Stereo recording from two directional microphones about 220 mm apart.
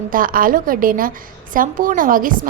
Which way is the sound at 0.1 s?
40° right (ahead or behind).